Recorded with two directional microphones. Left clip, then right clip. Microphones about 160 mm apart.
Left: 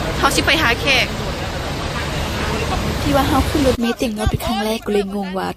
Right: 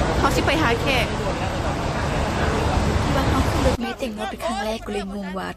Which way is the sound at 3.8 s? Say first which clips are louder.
Left 6 dB; 45° left (ahead or behind).